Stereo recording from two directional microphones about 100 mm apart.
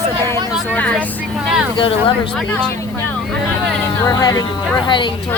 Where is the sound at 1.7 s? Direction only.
60° left (ahead or behind).